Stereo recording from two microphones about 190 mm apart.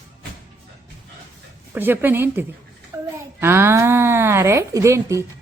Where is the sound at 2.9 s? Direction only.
15° right (ahead or behind).